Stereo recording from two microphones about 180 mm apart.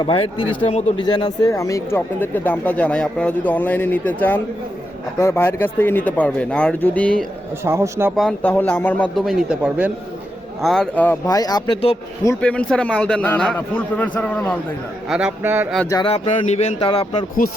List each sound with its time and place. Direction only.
0.0 s speech: 30° left (ahead or behind)
0.9 s speech: 25° left (ahead or behind); by 7.3 s 5° left (ahead or behind)
7.6 s a man's voice: 15° right (ahead or behind)
8.1 s a man's voice: centre (ahead or behind); by 11.8 s 20° left (ahead or behind)
12.4 s speech: 5° left (ahead or behind)
15.1 s a man's voice: 10° right (ahead or behind)
16.0 s speech: 35° left (ahead or behind)
16.9 s speech: 25° left (ahead or behind)